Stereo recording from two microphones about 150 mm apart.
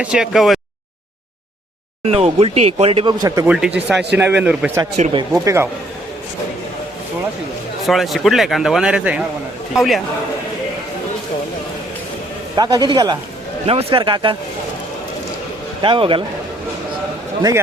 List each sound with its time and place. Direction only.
0.0 s speech: 5° right (ahead or behind)
2.0 s speech: 40° right (ahead or behind); by 3.4 s 25° right (ahead or behind)
3.4 s speech: 10° right (ahead or behind)
5.1 s a man's voice: 20° right (ahead or behind)
7.9 s speech: centre (ahead or behind)
12.5 s a man's voice: 30° right (ahead or behind)
15.8 s speech: 35° right (ahead or behind)